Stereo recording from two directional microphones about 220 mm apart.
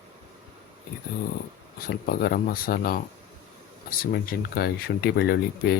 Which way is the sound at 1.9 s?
45° left (ahead or behind).